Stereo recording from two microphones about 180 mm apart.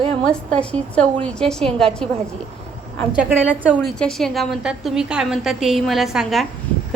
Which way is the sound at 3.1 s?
10° right (ahead or behind).